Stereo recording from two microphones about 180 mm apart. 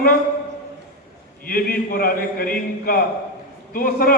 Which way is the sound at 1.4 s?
55° left (ahead or behind).